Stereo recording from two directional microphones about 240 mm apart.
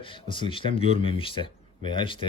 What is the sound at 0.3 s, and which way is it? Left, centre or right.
Speech, left.